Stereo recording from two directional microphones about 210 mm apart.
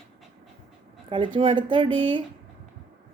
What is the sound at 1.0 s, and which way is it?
A woman's voice, 25° right (ahead or behind).